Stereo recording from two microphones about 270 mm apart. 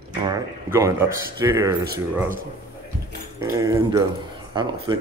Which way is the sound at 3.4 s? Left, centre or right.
Centre.